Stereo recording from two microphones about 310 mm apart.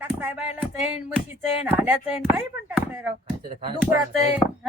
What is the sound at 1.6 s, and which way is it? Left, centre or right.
Speech, centre.